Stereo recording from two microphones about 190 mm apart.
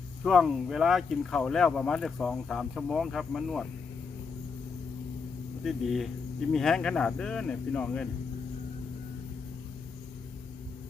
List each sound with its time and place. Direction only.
0.2 s speech: centre (ahead or behind)
5.6 s speech: centre (ahead or behind)